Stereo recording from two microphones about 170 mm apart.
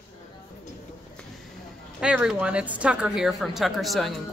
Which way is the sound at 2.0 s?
5° right (ahead or behind).